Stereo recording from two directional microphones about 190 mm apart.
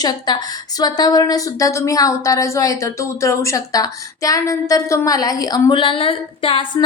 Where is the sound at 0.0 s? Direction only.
20° left (ahead or behind).